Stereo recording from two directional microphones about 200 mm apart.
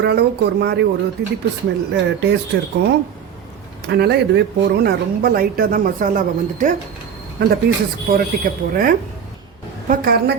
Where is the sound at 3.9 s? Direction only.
55° right (ahead or behind).